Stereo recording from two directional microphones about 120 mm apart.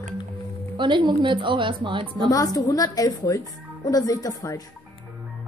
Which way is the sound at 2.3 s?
30° left (ahead or behind).